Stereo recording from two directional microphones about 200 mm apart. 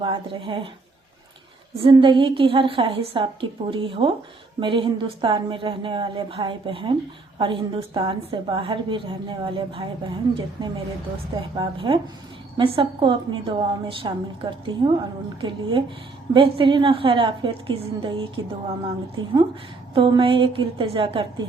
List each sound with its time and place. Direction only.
0.0 s a woman's voice: 25° right (ahead or behind)
1.8 s a woman's voice: 25° right (ahead or behind)